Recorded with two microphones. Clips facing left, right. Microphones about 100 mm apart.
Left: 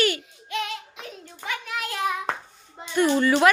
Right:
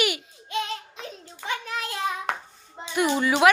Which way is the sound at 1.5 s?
30° right (ahead or behind).